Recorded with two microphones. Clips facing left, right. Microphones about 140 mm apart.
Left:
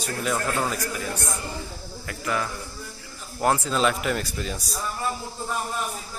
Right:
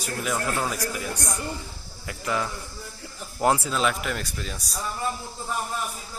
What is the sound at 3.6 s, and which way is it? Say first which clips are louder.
A man's voice: left 3 dB; centre (ahead or behind).